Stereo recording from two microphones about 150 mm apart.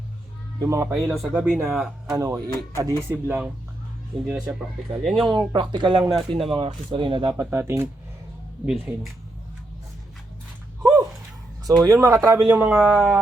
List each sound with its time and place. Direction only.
0.6 s speech: 20° right (ahead or behind)
1.1 s speech: centre (ahead or behind)
2.0 s speech: 20° right (ahead or behind); by 5.5 s centre (ahead or behind)
5.5 s speech: 30° right (ahead or behind)
6.1 s speech: centre (ahead or behind)
6.9 s speech: 35° right (ahead or behind)
7.3 s speech: 15° right (ahead or behind)
8.6 s speech: 5° right (ahead or behind)
11.8 s speech: 20° right (ahead or behind)